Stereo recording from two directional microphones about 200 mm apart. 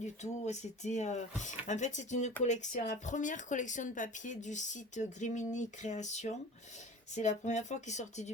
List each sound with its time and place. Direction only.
0.0 s speech: 35° left (ahead or behind)